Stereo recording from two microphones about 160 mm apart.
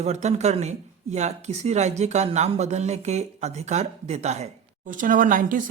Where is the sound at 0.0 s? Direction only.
45° right (ahead or behind).